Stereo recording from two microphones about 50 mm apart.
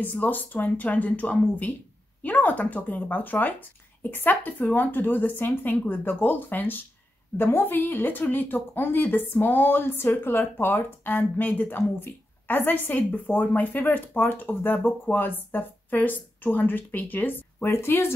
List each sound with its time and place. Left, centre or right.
0.0 s speech: left
17.6 s speech: left